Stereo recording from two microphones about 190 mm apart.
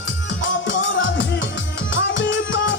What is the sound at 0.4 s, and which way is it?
Music, 80° left.